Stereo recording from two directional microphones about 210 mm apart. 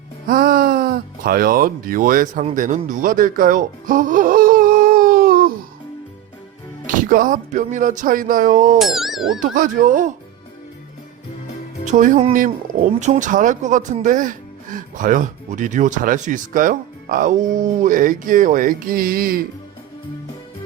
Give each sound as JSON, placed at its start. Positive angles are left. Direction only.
{"t": 0.3, "sound": "speech", "side_deg": -45}
{"t": 6.8, "sound": "speech", "side_deg": -40}
{"t": 8.8, "sound": "speech", "side_deg": 0}
{"t": 9.4, "sound": "speech", "side_deg": -40}
{"t": 11.9, "sound": "speech", "side_deg": -35}